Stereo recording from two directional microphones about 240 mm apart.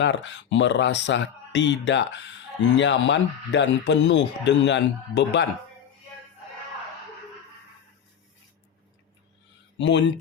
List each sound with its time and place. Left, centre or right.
0.0 s speech: left
9.7 s speech: left